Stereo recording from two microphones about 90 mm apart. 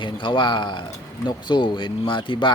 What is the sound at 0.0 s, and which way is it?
Speech, 65° left (ahead or behind).